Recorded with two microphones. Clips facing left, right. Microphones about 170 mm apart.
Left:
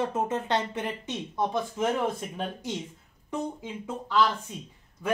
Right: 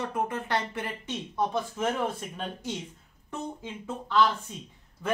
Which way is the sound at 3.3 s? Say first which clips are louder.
Left 4 dB; 15° left (ahead or behind).